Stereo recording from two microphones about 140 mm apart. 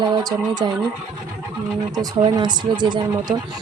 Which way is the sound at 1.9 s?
30° right (ahead or behind).